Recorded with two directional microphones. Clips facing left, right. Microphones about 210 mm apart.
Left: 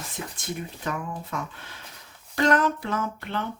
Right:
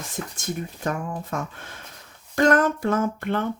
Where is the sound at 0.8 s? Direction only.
45° right (ahead or behind).